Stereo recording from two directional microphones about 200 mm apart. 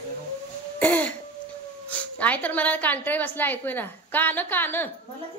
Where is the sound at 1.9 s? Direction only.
5° left (ahead or behind).